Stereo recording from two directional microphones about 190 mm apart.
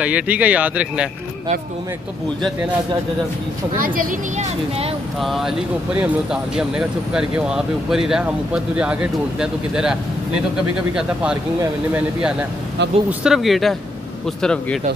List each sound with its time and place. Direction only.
0.0 s speech: 5° right (ahead or behind)
3.7 s a woman's voice: 45° right (ahead or behind)
5.2 s speech: centre (ahead or behind)